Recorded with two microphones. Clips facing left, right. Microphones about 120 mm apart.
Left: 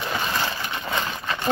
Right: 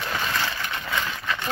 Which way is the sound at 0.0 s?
15° left (ahead or behind).